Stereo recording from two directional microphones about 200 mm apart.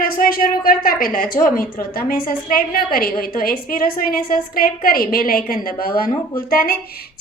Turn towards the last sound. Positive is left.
turn(degrees=50)  # may be behind; listen again after turning